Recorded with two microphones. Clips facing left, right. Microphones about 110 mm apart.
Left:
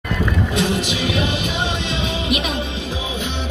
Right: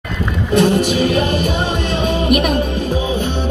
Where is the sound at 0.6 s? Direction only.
50° right (ahead or behind).